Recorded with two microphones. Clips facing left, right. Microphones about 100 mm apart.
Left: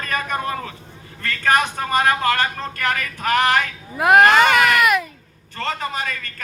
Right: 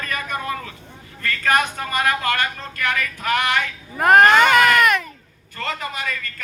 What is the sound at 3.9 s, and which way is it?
Speech, 5° left (ahead or behind).